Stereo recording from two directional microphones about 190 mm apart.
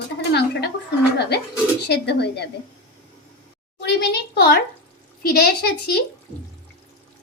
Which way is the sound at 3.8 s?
60° left (ahead or behind).